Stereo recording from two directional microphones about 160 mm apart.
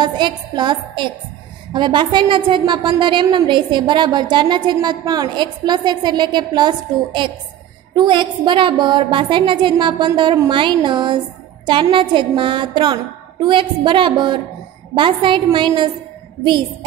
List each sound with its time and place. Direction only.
0.0 s a woman's voice: 25° right (ahead or behind)
7.9 s a woman's voice: 30° right (ahead or behind)